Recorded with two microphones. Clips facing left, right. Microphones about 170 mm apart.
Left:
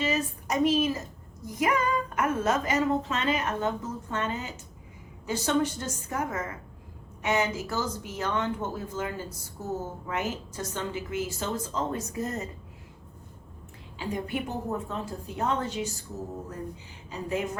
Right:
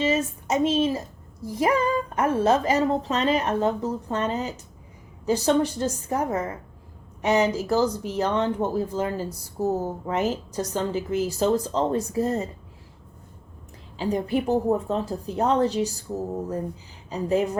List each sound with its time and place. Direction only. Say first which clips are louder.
0.0 s speech: right 5 dB; 25° right (ahead or behind)
14.0 s speech: right 7 dB; 35° right (ahead or behind)